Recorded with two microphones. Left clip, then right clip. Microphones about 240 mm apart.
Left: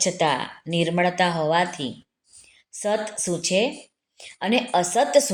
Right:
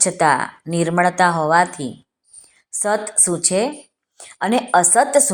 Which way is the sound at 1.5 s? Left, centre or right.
Right.